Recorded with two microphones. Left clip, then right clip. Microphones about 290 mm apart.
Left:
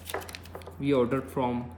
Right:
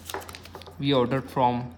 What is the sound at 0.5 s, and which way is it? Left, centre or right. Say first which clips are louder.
Speech: right 2 dB; right.